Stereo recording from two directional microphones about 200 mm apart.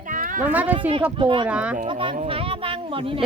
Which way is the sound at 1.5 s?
5° right (ahead or behind).